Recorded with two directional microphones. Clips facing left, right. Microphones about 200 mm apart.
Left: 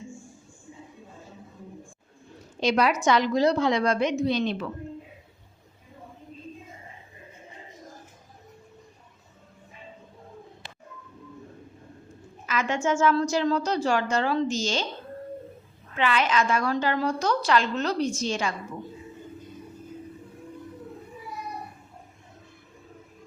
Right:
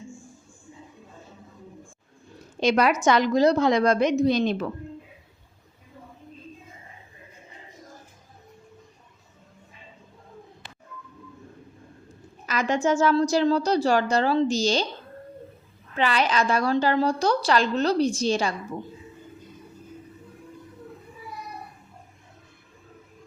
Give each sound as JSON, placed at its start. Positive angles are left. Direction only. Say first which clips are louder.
{"t": 2.6, "sound": "a woman's voice", "louder": "right 2 dB", "side_deg": -50}
{"t": 12.5, "sound": "a woman's voice", "louder": "right 3 dB", "side_deg": -35}
{"t": 16.0, "sound": "a woman's voice", "louder": "right 1 dB", "side_deg": -35}